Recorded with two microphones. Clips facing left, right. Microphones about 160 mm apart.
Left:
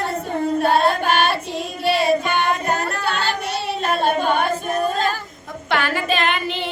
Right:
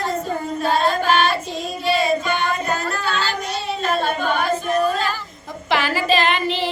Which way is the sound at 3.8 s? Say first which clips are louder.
Left 2 dB; 55° left (ahead or behind).